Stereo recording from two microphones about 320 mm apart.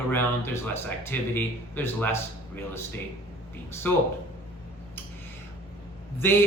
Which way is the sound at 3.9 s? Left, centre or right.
Centre.